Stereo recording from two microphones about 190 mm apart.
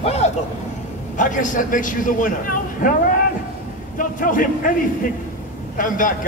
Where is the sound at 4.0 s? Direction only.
45° left (ahead or behind).